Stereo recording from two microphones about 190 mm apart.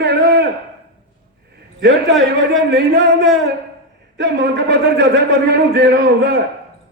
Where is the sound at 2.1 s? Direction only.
Centre (ahead or behind).